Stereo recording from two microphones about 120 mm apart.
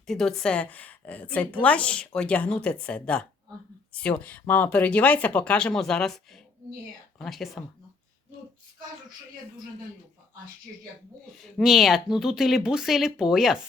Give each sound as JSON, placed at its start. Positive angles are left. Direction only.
{"t": 0.1, "sound": "speech", "side_deg": 5}
{"t": 11.5, "sound": "speech", "side_deg": 0}